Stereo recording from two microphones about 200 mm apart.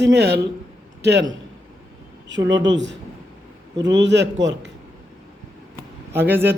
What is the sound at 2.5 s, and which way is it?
A man's voice, 65° right (ahead or behind).